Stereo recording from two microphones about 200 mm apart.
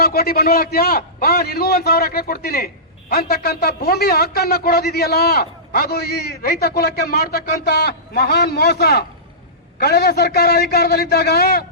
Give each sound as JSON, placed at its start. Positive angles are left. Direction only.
{"t": 0.0, "sound": "a man's voice", "side_deg": 50}